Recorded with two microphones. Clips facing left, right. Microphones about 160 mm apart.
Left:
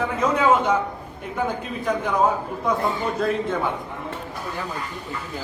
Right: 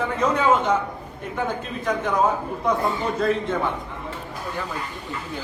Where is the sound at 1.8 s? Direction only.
10° left (ahead or behind).